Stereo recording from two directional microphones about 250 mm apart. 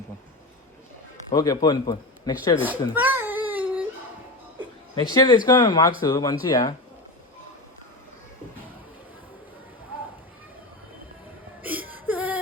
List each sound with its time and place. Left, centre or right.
1.3 s speech: centre
2.9 s babbling: centre
4.9 s speech: centre
11.6 s whimper: centre